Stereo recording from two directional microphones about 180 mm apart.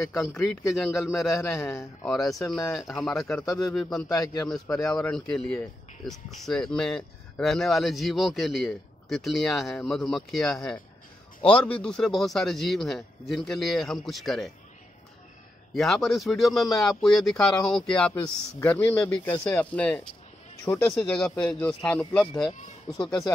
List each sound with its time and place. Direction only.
0.0 s a man's voice: 15° left (ahead or behind)
1.0 s speech: centre (ahead or behind)
1.4 s a man's voice: 15° left (ahead or behind)
2.7 s speech: 5° left (ahead or behind)
4.1 s a man's voice: 20° left (ahead or behind)
4.7 s speech: 5° left (ahead or behind)
15.7 s speech: centre (ahead or behind)